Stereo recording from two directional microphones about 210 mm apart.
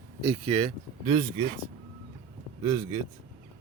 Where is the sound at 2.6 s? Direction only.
20° right (ahead or behind).